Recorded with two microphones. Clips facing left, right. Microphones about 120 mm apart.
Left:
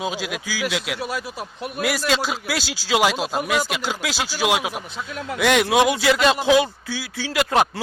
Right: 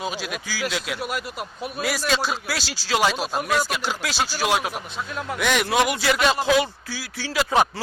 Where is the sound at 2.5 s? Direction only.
10° left (ahead or behind).